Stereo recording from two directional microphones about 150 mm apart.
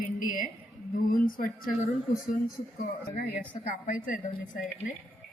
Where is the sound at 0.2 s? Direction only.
65° left (ahead or behind).